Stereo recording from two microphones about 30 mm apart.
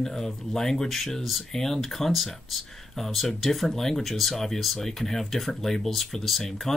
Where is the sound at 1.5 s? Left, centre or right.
Centre.